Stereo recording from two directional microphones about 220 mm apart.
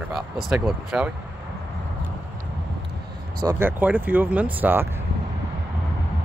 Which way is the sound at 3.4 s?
10° right (ahead or behind).